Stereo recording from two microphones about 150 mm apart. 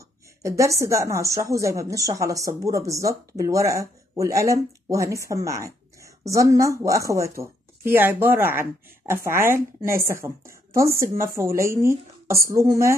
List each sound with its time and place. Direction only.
0.4 s a woman's voice: 20° right (ahead or behind)